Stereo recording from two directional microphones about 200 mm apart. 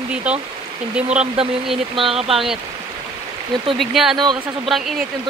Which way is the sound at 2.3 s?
Centre (ahead or behind).